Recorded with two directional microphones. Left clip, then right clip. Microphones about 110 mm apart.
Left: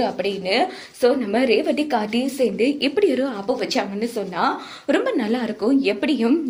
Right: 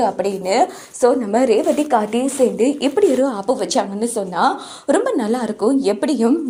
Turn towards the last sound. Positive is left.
turn(degrees=-45)  # may be behind; listen again after turning